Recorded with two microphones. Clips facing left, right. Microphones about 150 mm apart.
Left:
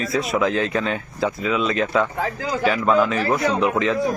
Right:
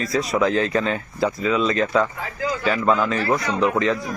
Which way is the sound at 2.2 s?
80° left.